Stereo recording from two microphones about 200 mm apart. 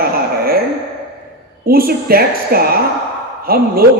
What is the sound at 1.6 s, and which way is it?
Speech, 50° right (ahead or behind).